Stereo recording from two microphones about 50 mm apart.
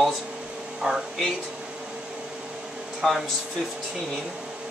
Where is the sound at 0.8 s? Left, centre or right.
Centre.